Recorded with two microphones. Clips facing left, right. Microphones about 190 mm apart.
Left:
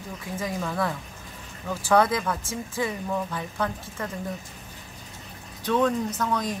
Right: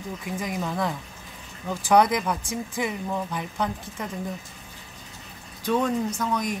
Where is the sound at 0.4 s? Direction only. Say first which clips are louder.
Left 1 dB; 15° right (ahead or behind).